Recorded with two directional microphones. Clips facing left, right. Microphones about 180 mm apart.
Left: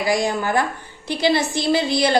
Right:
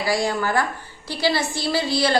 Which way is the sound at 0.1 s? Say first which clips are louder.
Left 1 dB; 20° left (ahead or behind).